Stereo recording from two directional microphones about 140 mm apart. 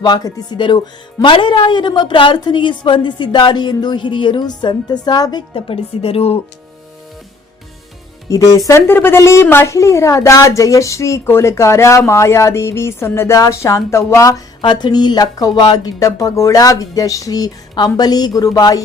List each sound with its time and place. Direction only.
0.0 s a woman's voice: 30° left (ahead or behind)
5.5 s speech: 40° left (ahead or behind)
8.3 s a woman's voice: 25° left (ahead or behind)
14.6 s a woman's voice: 35° left (ahead or behind)